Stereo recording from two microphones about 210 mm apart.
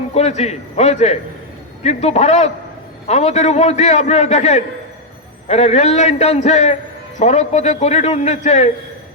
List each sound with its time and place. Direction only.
0.1 s a man's voice: 30° left (ahead or behind)